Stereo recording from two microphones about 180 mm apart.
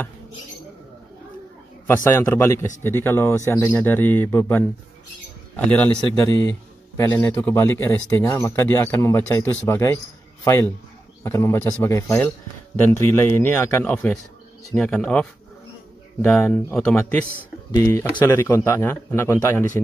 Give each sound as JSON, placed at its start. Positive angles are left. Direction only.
{"t": 2.0, "sound": "speech", "side_deg": 15}
{"t": 7.0, "sound": "speech", "side_deg": 10}
{"t": 17.6, "sound": "speech", "side_deg": 15}